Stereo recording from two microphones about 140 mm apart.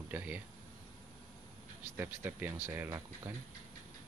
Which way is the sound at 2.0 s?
15° right (ahead or behind).